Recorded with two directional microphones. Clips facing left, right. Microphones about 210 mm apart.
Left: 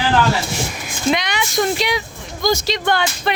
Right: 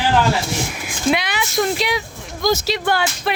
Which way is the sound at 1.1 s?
5° right (ahead or behind).